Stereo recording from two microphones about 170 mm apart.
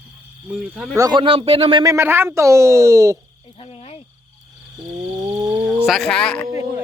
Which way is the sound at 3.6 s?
35° left (ahead or behind).